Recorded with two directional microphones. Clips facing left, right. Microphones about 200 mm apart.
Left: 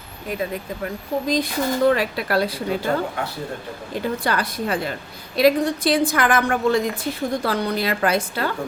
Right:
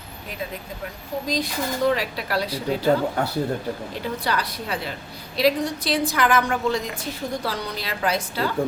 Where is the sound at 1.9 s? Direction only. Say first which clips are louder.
Left 4 dB; 55° left (ahead or behind).